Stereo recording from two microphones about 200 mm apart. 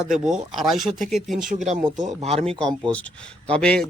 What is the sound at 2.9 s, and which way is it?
Speech, 5° left (ahead or behind).